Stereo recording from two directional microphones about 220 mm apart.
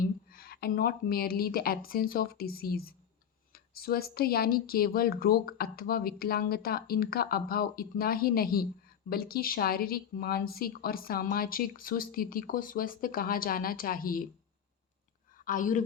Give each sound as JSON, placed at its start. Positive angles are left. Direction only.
{"t": 0.0, "sound": "speech", "side_deg": 40}
{"t": 15.4, "sound": "speech", "side_deg": 35}